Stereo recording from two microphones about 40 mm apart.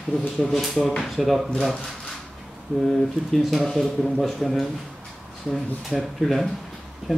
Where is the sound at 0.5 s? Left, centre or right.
Centre.